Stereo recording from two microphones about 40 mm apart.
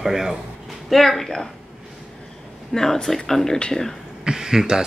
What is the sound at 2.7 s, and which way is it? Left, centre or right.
Speech, centre.